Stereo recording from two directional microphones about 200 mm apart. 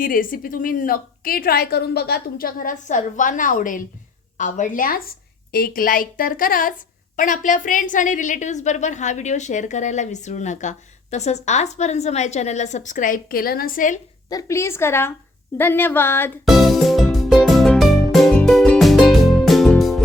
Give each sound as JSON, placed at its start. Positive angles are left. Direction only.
{"t": 0.0, "sound": "a woman's voice", "side_deg": 45}
{"t": 14.3, "sound": "a woman's voice", "side_deg": 15}
{"t": 16.5, "sound": "music", "side_deg": 0}